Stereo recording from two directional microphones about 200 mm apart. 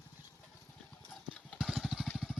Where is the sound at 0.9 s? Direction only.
Centre (ahead or behind).